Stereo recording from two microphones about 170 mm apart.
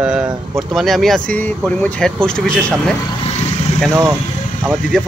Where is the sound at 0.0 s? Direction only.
5° right (ahead or behind).